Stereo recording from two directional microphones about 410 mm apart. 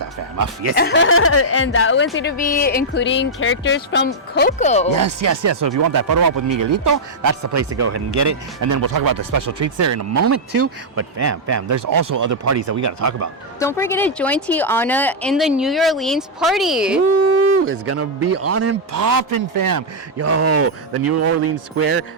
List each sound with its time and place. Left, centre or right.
0.0 s speech: right
0.8 s speech: left
4.9 s speech: right
13.6 s speech: centre
17.4 s speech: right
18.9 s speech: right
20.1 s speech: right